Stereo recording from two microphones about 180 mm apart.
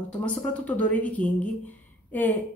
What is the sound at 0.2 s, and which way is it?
A woman's voice, 5° left (ahead or behind).